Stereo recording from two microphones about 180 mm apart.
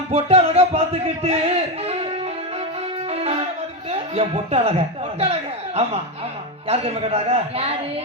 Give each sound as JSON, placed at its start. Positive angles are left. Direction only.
{"t": 0.1, "sound": "speech", "side_deg": -35}
{"t": 3.1, "sound": "music", "side_deg": -35}
{"t": 3.9, "sound": "speech", "side_deg": -35}